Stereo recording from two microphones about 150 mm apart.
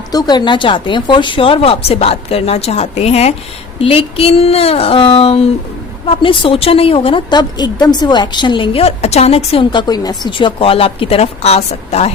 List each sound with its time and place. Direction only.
0.1 s a woman's voice: 25° left (ahead or behind); by 12.1 s 45° left (ahead or behind)